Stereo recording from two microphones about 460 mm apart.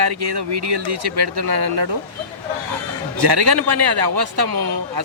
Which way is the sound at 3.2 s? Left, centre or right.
Right.